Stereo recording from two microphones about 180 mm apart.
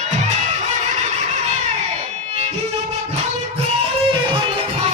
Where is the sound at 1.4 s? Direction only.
40° right (ahead or behind).